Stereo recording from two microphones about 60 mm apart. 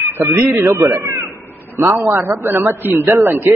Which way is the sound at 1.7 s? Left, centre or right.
Right.